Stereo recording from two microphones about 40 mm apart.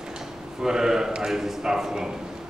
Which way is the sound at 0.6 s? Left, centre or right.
Centre.